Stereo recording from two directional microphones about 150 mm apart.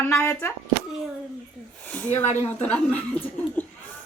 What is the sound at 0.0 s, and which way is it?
Speech, 15° left (ahead or behind).